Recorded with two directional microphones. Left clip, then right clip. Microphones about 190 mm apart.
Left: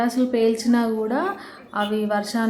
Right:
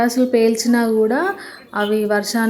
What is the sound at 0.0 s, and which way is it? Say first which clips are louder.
A woman's voice: right 5 dB; 20° right (ahead or behind).